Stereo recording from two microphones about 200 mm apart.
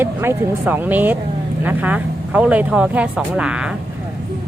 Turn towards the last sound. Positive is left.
turn(degrees=-5)  # may be behind; listen again after turning